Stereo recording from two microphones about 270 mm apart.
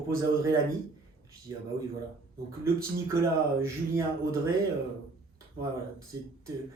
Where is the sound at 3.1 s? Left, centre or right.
Centre.